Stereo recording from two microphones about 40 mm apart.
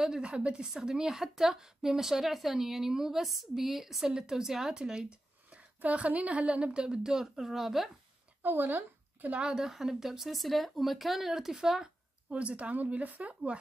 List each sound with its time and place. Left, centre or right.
0.2 s a woman's voice: right
0.7 s a woman's voice: centre
5.5 s a woman's voice: right; by 7.9 s centre
8.4 s a sound: right
9.5 s a woman's voice: centre
12.3 s speech: right